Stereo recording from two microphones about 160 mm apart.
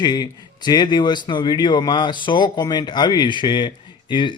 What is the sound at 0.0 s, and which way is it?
Speech, 25° left (ahead or behind).